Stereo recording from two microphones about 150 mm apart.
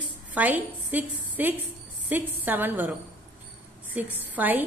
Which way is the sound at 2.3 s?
15° right (ahead or behind).